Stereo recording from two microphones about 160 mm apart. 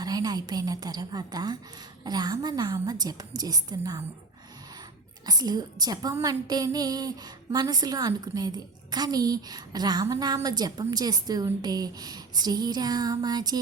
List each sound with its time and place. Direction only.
0.0 s a woman's voice: 25° right (ahead or behind)
5.2 s a woman's voice: 25° right (ahead or behind)